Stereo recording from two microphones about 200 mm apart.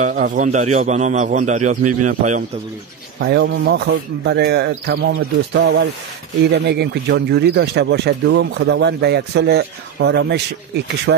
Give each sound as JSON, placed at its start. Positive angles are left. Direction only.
{"t": 0.0, "sound": "a man's voice", "side_deg": -40}
{"t": 3.2, "sound": "speech", "side_deg": -55}